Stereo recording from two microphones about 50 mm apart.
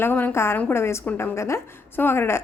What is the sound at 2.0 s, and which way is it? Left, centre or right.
Speech, left.